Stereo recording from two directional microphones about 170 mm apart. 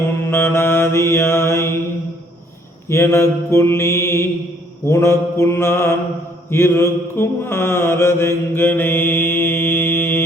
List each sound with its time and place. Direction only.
0.3 s mantra: 15° left (ahead or behind)
2.9 s mantra: 15° left (ahead or behind)